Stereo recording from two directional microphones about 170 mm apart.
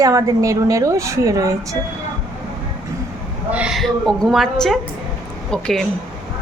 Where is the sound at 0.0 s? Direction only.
20° right (ahead or behind).